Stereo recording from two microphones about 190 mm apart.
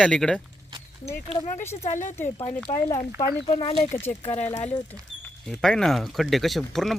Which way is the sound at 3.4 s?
30° left (ahead or behind).